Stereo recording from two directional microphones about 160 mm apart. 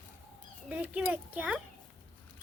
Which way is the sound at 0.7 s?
10° right (ahead or behind).